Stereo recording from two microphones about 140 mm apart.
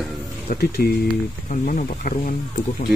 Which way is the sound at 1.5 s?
65° left (ahead or behind).